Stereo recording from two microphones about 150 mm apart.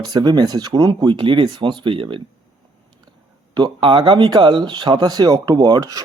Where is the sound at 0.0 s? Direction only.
25° right (ahead or behind).